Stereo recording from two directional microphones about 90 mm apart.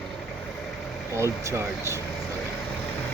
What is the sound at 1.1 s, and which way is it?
Speech, 35° right (ahead or behind).